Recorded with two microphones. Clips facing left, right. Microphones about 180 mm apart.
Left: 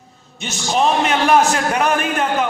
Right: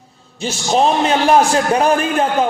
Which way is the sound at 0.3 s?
30° right (ahead or behind).